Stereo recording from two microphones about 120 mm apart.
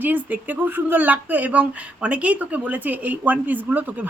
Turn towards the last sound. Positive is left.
turn(degrees=-15)  # may be behind; listen again after turning